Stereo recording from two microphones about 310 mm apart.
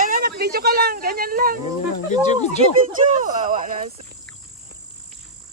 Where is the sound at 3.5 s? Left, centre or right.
Right.